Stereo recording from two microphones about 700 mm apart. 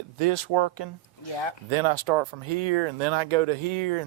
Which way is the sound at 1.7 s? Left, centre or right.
Right.